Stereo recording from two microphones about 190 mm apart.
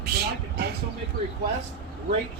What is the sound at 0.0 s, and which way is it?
Vehicle, 55° right (ahead or behind).